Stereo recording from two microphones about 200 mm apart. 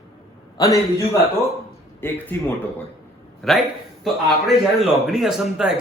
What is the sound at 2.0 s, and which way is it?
Speech, 10° left (ahead or behind).